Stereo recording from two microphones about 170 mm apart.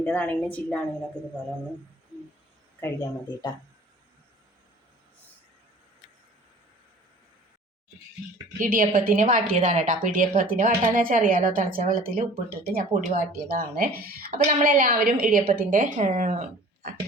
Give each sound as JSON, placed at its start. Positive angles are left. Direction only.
{"t": 0.0, "sound": "a woman's voice", "side_deg": 10}
{"t": 2.8, "sound": "speech", "side_deg": 20}
{"t": 8.5, "sound": "speech", "side_deg": -55}